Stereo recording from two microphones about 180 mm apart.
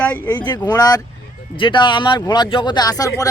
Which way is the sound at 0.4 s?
20° left (ahead or behind).